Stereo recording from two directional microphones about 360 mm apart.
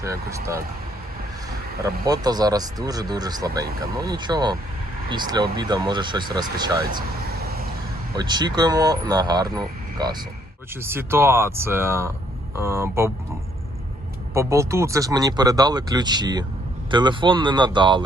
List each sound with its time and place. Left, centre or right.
0.0 s speech: centre
1.8 s speech: centre
7.4 s a sound: right
8.1 s speech: centre
14.3 s speech: centre